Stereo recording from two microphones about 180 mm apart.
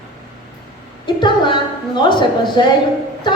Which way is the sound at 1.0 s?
25° left (ahead or behind).